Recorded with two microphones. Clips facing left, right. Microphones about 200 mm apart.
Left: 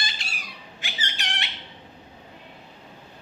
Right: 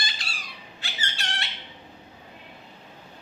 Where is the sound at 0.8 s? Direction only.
15° left (ahead or behind).